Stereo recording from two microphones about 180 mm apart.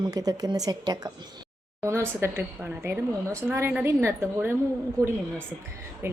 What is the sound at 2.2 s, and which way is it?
A woman's voice, 15° right (ahead or behind).